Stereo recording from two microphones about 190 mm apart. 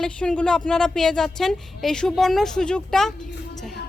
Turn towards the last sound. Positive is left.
turn(degrees=0)  # may be behind; listen again after turning